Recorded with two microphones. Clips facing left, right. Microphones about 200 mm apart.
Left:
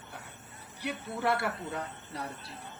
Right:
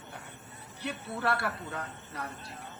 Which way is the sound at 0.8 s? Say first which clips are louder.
Left 1 dB; 15° left (ahead or behind).